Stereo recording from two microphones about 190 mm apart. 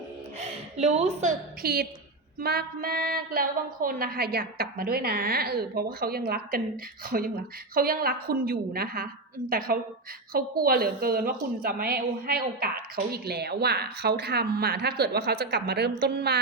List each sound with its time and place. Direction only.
0.3 s a woman's voice: 35° right (ahead or behind)
1.6 s a woman's voice: 55° right (ahead or behind)